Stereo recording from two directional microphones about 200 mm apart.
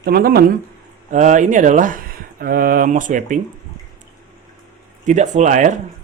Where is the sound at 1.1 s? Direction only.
40° right (ahead or behind).